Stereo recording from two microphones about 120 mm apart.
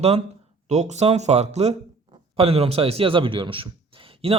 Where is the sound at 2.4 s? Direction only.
55° right (ahead or behind).